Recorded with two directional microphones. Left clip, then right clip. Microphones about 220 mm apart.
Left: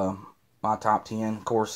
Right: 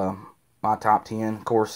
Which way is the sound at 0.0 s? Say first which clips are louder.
Right 1 dB; 25° right (ahead or behind).